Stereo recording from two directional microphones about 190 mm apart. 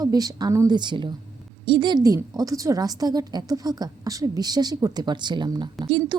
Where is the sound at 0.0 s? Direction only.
20° right (ahead or behind).